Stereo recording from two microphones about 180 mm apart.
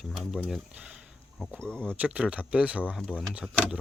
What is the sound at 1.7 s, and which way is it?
Speech, 5° left (ahead or behind).